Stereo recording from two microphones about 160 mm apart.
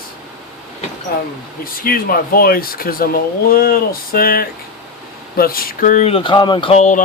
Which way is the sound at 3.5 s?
70° left (ahead or behind).